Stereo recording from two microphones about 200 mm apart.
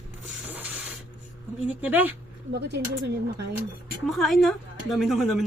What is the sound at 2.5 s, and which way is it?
Speech, 60° right (ahead or behind).